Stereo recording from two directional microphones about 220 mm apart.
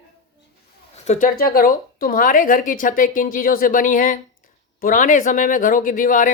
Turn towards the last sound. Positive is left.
turn(degrees=35)  # may be behind; listen again after turning